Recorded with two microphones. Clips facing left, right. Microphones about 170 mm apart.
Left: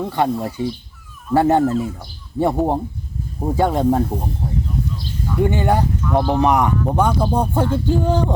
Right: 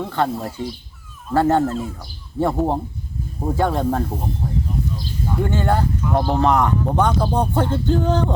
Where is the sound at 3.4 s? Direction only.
15° left (ahead or behind).